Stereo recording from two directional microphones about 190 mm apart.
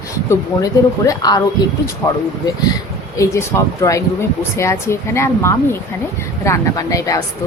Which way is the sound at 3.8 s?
15° left (ahead or behind).